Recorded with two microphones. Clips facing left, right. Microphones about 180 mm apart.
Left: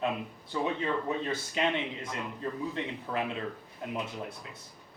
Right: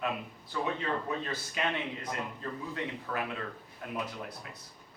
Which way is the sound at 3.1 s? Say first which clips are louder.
Left 5 dB; 25° left (ahead or behind).